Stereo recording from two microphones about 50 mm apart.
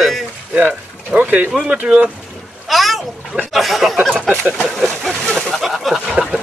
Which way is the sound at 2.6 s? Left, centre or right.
Centre.